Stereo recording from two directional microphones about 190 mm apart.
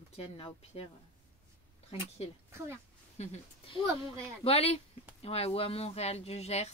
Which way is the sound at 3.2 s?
30° left (ahead or behind).